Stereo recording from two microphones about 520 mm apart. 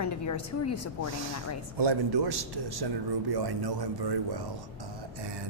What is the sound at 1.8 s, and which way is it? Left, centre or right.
A man's voice, right.